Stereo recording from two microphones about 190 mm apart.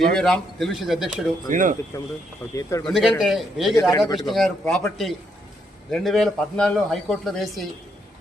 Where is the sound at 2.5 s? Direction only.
15° left (ahead or behind).